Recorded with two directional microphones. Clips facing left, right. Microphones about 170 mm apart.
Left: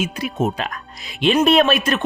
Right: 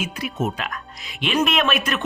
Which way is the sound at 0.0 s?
30° left (ahead or behind).